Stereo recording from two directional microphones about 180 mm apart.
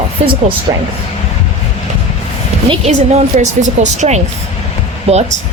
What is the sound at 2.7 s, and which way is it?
A woman's voice, 40° right (ahead or behind).